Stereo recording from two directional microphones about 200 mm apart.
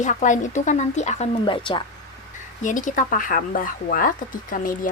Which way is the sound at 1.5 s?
25° left (ahead or behind).